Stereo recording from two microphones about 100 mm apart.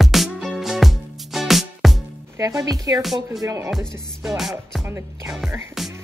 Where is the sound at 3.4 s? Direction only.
30° right (ahead or behind).